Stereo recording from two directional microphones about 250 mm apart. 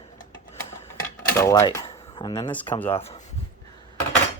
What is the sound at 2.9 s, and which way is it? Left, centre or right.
Speech, left.